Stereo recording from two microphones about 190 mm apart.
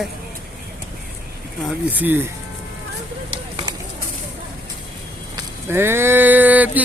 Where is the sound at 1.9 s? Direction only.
10° right (ahead or behind).